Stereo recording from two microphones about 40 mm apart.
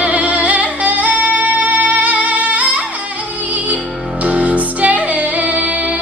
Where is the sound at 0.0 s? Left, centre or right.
Right.